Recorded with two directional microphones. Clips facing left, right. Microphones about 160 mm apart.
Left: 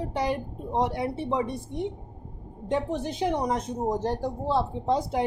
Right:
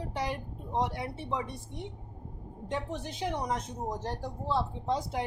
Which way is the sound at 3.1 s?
20° left (ahead or behind).